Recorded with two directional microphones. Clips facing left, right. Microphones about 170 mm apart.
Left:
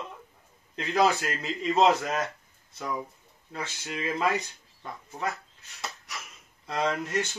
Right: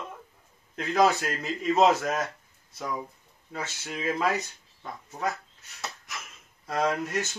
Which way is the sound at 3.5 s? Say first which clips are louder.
Even; 5° right (ahead or behind).